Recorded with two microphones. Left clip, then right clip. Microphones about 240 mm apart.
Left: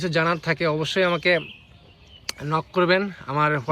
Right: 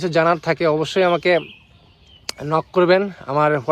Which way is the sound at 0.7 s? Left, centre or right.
Right.